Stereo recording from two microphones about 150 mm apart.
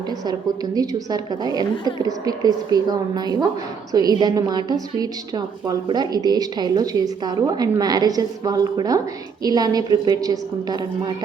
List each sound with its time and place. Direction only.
0.3 s a woman's voice: 25° right (ahead or behind)